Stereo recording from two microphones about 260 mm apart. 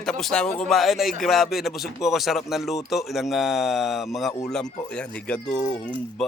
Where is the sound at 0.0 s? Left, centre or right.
Centre.